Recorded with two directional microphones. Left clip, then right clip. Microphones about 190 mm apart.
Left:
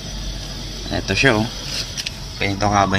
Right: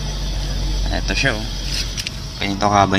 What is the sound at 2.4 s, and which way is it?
Speech, 5° left (ahead or behind).